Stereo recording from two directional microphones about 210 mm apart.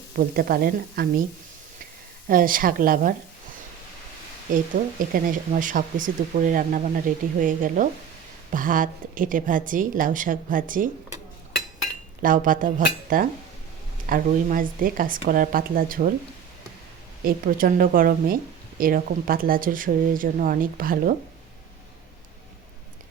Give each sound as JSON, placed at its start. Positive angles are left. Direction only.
{"t": 0.2, "sound": "speech", "side_deg": -45}
{"t": 2.2, "sound": "speech", "side_deg": -40}
{"t": 4.5, "sound": "speech", "side_deg": -40}
{"t": 12.2, "sound": "speech", "side_deg": -40}
{"t": 17.2, "sound": "speech", "side_deg": -40}